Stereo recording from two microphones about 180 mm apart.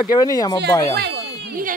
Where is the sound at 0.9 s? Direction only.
65° right (ahead or behind).